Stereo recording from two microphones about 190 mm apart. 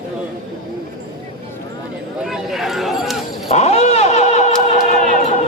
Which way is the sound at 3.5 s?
35° left (ahead or behind).